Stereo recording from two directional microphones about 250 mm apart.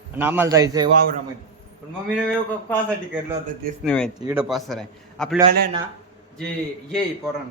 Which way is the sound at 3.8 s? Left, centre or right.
Centre.